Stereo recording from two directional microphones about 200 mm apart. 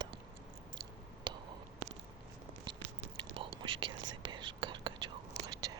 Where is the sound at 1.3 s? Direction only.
20° right (ahead or behind).